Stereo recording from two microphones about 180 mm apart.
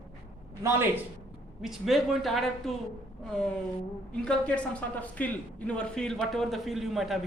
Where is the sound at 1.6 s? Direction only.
Centre (ahead or behind).